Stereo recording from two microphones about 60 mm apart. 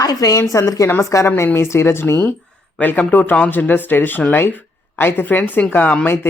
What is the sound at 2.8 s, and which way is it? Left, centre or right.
Speech, left.